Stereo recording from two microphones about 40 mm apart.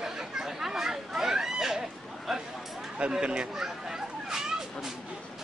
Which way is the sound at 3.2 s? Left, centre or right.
Right.